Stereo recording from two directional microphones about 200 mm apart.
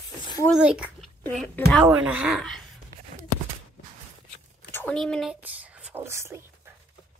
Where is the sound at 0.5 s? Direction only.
5° right (ahead or behind).